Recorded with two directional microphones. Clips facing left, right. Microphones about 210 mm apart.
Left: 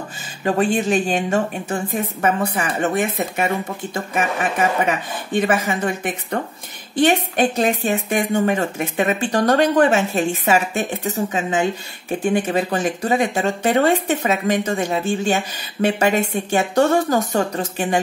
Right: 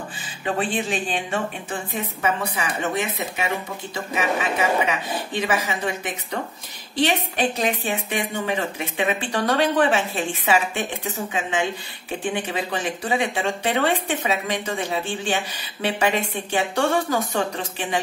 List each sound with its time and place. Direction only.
0.4 s a woman's voice: 45° left (ahead or behind)